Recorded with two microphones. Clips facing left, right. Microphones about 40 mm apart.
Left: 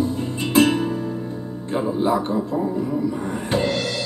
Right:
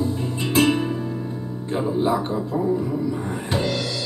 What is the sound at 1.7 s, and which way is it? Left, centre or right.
Music, centre.